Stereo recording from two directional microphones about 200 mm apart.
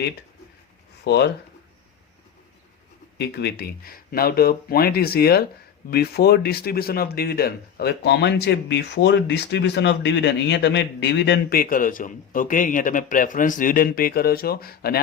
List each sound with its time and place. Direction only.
1.0 s speech: 55° left (ahead or behind)
3.2 s speech: 55° left (ahead or behind)